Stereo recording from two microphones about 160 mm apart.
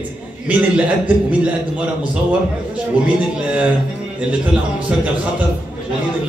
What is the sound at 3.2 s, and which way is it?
A man's voice, 5° right (ahead or behind).